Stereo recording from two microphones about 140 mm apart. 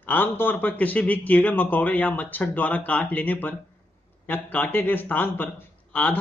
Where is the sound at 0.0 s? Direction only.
15° left (ahead or behind).